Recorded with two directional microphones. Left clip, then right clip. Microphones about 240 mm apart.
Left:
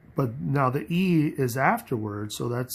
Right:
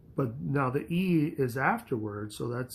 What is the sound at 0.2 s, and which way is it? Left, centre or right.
Speech, left.